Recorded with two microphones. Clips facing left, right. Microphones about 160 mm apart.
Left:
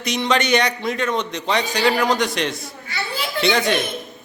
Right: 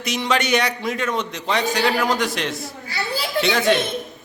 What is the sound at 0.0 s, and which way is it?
A man's voice, 5° right (ahead or behind).